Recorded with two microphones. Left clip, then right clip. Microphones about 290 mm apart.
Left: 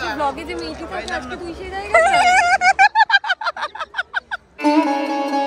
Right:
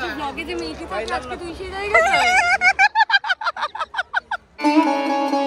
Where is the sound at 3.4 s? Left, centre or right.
Centre.